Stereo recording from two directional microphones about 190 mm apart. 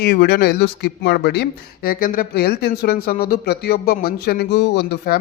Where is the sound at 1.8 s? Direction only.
50° left (ahead or behind).